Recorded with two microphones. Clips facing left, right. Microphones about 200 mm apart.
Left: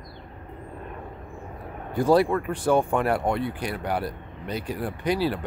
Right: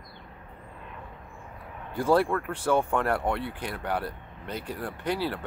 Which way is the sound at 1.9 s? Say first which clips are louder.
Left 4 dB; 15° left (ahead or behind).